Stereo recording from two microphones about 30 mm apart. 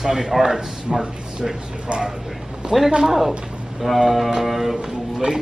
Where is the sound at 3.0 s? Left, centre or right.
Centre.